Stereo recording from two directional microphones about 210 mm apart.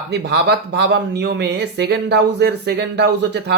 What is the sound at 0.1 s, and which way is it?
Speech, 50° right (ahead or behind).